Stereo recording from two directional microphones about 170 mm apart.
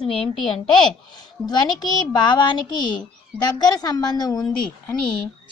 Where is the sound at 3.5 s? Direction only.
25° left (ahead or behind).